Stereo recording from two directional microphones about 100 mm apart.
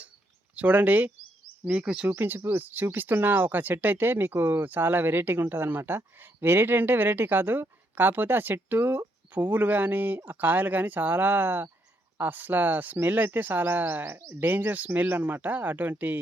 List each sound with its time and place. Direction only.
0.5 s a woman's voice: 15° right (ahead or behind)